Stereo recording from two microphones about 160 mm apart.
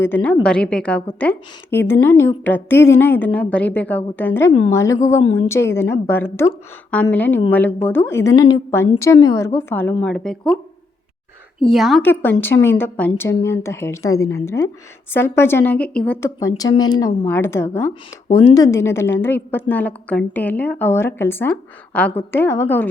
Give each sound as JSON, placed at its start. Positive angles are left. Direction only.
{"t": 0.0, "sound": "a woman's voice", "side_deg": 10}
{"t": 11.7, "sound": "speech", "side_deg": 0}
{"t": 12.0, "sound": "a woman's voice", "side_deg": 10}